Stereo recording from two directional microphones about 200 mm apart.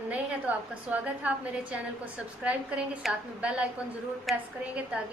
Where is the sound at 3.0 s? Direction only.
5° right (ahead or behind).